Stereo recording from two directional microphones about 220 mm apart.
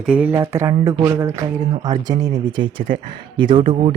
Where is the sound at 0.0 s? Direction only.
5° right (ahead or behind).